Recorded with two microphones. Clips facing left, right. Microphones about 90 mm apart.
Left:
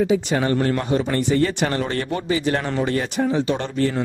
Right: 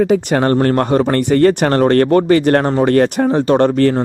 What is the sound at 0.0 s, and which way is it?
Speech, 55° right (ahead or behind).